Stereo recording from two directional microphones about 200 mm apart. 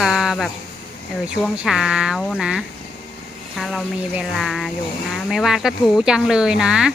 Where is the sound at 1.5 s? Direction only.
5° right (ahead or behind).